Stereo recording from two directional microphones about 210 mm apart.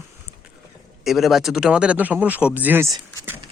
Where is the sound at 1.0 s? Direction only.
Centre (ahead or behind).